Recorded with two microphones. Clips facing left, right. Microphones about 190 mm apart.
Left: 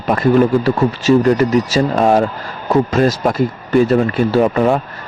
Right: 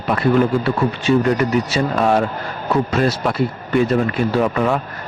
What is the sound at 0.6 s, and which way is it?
Speech, 40° left (ahead or behind).